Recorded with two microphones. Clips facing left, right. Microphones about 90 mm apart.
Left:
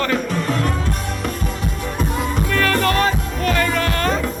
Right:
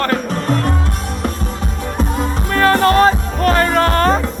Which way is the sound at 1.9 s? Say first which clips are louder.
Right 3 dB; 30° right (ahead or behind).